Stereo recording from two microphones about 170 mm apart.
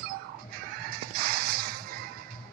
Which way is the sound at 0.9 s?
60° right (ahead or behind).